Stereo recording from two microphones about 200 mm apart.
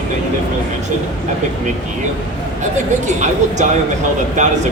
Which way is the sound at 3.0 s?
35° right (ahead or behind).